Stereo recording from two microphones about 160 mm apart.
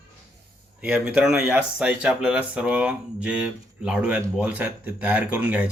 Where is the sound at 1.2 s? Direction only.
5° right (ahead or behind).